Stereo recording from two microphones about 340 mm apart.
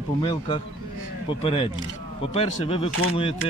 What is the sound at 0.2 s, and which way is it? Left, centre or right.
Speech, centre.